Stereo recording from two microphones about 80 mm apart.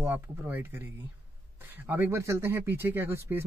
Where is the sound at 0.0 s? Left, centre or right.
Right.